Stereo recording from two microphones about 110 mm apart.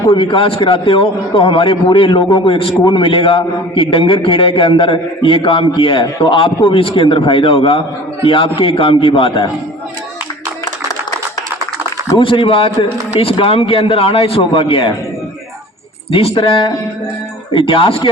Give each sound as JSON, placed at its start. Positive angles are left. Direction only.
{"t": 0.1, "sound": "a man's voice", "side_deg": 50}
{"t": 12.1, "sound": "a man's voice", "side_deg": 55}
{"t": 16.1, "sound": "a man's voice", "side_deg": 55}